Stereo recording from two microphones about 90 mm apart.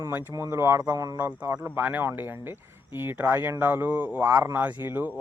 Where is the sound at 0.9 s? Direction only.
40° right (ahead or behind).